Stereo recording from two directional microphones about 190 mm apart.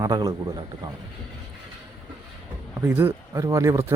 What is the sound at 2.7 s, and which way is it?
Speech, 10° right (ahead or behind).